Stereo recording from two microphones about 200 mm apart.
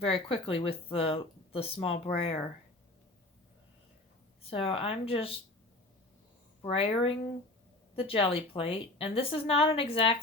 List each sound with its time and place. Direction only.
0.0 s speech: 30° left (ahead or behind)
4.4 s speech: 30° left (ahead or behind)
6.6 s speech: 30° left (ahead or behind)